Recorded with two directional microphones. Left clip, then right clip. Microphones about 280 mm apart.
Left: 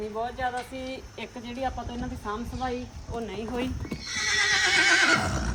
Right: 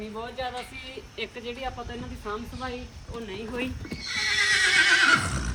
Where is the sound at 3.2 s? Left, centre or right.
Left.